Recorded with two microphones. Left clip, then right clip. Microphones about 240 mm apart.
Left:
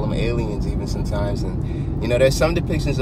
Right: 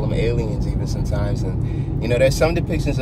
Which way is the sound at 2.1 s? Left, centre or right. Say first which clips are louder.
Even; left.